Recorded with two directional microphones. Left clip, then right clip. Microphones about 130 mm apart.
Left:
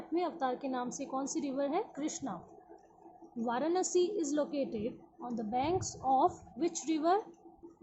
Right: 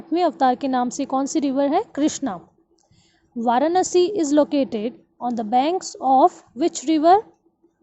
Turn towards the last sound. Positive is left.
turn(degrees=-75)  # may be behind; listen again after turning